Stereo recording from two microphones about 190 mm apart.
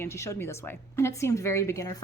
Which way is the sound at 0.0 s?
15° left (ahead or behind).